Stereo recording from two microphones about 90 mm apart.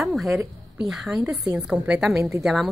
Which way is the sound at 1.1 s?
40° right (ahead or behind).